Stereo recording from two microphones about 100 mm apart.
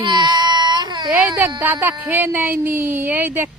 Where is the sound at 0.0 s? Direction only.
50° right (ahead or behind).